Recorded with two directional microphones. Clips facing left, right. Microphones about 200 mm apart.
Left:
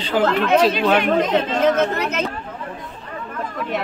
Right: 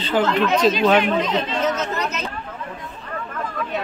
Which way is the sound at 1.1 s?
45° left (ahead or behind).